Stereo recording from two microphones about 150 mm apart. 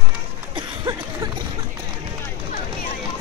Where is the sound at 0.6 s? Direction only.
25° right (ahead or behind).